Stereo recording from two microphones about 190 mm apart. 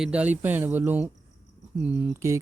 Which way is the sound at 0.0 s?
5° right (ahead or behind).